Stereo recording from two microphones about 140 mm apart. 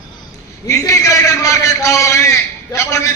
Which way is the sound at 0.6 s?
25° left (ahead or behind).